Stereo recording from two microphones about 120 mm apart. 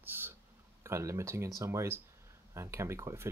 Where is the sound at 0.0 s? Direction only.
15° right (ahead or behind).